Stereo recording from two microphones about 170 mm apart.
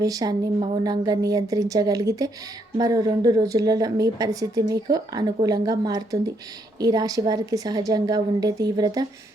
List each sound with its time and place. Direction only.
0.0 s a woman's voice: 20° right (ahead or behind)